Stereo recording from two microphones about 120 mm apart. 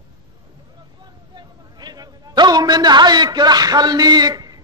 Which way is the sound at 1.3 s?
35° right (ahead or behind).